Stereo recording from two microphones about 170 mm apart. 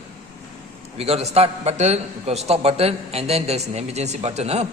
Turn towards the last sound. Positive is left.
turn(degrees=-40)  # may be behind; listen again after turning